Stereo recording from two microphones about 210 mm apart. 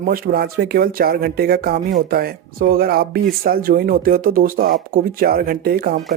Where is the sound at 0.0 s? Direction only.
45° right (ahead or behind).